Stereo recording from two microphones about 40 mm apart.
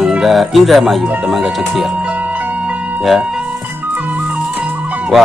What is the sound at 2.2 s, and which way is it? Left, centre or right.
Music, right.